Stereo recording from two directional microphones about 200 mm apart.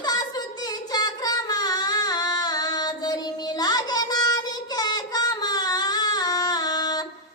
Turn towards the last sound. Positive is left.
turn(degrees=20)  # may be behind; listen again after turning